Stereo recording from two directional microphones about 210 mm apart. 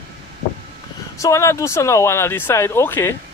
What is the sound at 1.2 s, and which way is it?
Speech, 15° left (ahead or behind).